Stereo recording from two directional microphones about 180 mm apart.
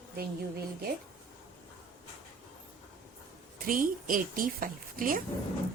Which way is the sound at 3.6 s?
50° right (ahead or behind).